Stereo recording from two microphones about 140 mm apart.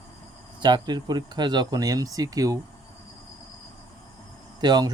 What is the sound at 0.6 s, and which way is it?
Speech, 30° right (ahead or behind).